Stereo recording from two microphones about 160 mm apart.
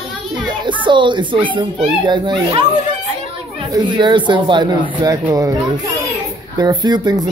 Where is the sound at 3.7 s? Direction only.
30° right (ahead or behind).